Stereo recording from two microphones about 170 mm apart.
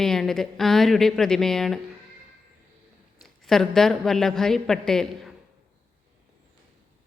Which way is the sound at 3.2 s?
Centre (ahead or behind).